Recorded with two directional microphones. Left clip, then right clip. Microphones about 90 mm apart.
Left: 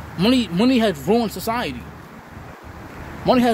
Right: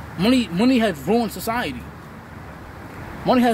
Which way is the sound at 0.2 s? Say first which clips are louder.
Left 1 dB; 45° left (ahead or behind).